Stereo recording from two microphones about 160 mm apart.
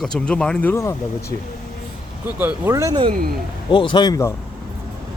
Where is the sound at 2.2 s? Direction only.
10° right (ahead or behind).